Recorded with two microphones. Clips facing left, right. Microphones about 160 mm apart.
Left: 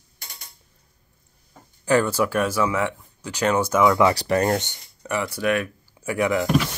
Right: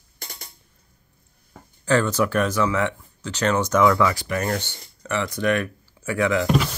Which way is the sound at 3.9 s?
20° left (ahead or behind).